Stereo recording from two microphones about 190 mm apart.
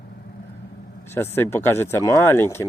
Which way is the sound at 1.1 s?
10° left (ahead or behind).